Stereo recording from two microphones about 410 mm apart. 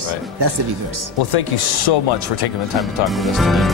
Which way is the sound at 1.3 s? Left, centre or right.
Left.